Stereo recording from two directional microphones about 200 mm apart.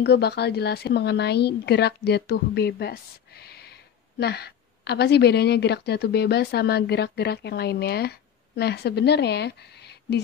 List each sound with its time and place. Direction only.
0.0 s a woman's voice: 55° left (ahead or behind)